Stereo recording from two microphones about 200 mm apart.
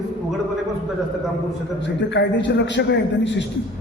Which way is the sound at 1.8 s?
65° left (ahead or behind).